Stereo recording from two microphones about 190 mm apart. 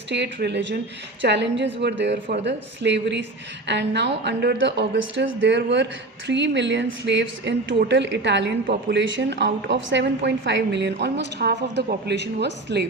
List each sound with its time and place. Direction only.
0.1 s a woman's voice: 65° right (ahead or behind)
8.6 s speech: 50° right (ahead or behind)
9.0 s a woman's voice: 70° right (ahead or behind)